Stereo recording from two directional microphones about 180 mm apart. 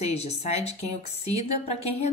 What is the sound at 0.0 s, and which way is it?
A woman's voice, 35° left (ahead or behind).